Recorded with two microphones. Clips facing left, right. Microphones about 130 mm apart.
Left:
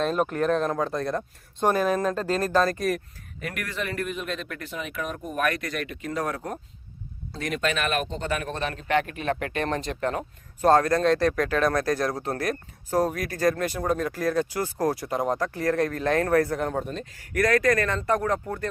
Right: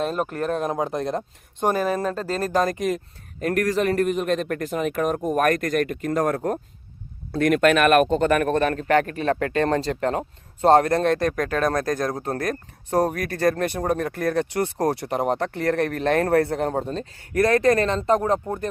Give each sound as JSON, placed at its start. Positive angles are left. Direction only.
{"t": 0.0, "sound": "speech", "side_deg": -5}
{"t": 0.6, "sound": "speech", "side_deg": -20}
{"t": 3.4, "sound": "speech", "side_deg": -40}
{"t": 11.0, "sound": "speech", "side_deg": -50}
{"t": 13.0, "sound": "speech", "side_deg": -55}
{"t": 14.8, "sound": "speech", "side_deg": -30}
{"t": 15.7, "sound": "speech", "side_deg": -65}
{"t": 16.0, "sound": "speech", "side_deg": -30}